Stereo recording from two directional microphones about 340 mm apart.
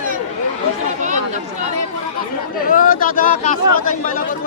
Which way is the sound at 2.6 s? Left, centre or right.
Left.